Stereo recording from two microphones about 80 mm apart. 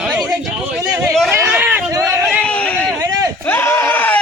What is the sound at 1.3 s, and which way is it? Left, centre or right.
Speech, right.